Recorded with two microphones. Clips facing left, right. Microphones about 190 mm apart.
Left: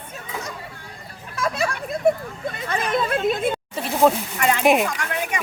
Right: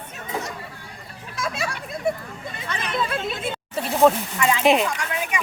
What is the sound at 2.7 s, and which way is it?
Speech, 45° left (ahead or behind).